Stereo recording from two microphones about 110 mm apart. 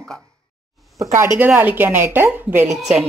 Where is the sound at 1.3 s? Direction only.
15° right (ahead or behind).